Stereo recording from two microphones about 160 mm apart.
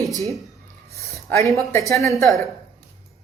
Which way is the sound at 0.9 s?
20° left (ahead or behind).